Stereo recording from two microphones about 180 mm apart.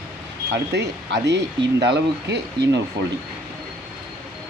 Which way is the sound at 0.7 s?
70° right (ahead or behind).